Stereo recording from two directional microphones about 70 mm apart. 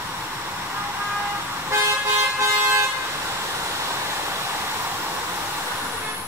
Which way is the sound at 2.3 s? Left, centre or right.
Right.